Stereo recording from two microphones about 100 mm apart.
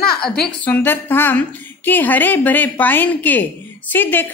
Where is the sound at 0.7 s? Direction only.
20° left (ahead or behind).